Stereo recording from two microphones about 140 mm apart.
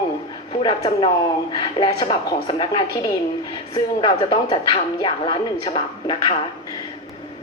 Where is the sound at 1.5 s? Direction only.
30° left (ahead or behind).